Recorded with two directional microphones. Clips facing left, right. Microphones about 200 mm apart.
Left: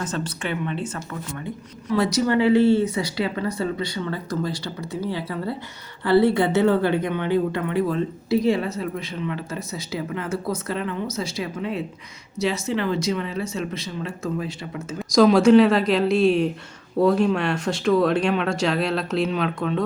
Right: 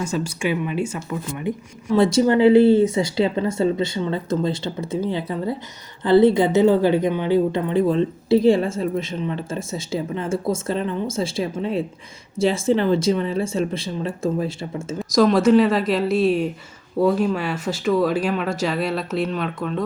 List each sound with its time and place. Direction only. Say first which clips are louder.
0.0 s a woman's voice: right 4 dB; 10° right (ahead or behind); by 14.8 s 30° right (ahead or behind)
14.9 s speech: left 1 dB; centre (ahead or behind)